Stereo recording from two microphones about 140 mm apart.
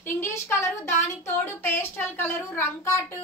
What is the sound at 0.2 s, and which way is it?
Speech, 20° left (ahead or behind).